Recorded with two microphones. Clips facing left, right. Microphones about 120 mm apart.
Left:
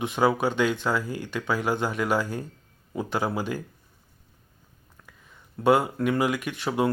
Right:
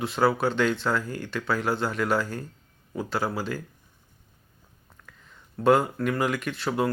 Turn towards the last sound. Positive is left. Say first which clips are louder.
# left 1 dB
turn(degrees=15)  # may be behind; listen again after turning